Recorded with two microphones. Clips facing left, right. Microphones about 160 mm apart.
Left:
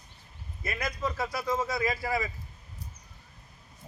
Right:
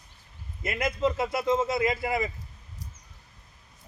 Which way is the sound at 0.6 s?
25° right (ahead or behind).